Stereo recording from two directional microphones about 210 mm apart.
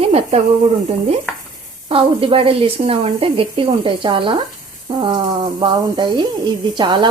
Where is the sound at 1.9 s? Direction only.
25° right (ahead or behind).